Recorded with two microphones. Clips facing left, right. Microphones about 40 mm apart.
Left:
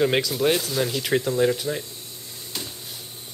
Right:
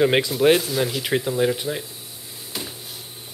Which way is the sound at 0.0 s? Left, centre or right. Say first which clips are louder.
Right 3 dB; centre.